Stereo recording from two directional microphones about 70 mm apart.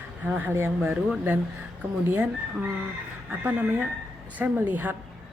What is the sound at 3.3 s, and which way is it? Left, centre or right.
Speech, right.